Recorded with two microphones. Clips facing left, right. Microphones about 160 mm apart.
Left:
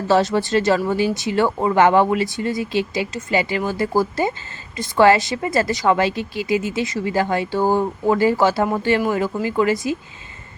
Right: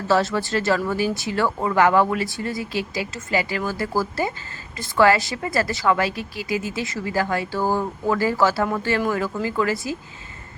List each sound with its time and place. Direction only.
0.1 s a woman's voice: 20° left (ahead or behind)